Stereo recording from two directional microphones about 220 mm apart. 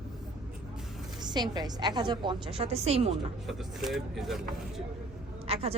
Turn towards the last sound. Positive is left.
turn(degrees=-25)  # may be behind; listen again after turning